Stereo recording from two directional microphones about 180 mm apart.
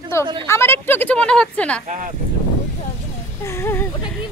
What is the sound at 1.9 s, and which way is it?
Speech, 45° right (ahead or behind).